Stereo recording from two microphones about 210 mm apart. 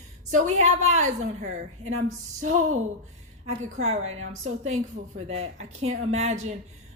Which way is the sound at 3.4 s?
30° right (ahead or behind).